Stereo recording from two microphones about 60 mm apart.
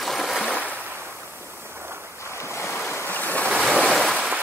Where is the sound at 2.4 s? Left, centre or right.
Left.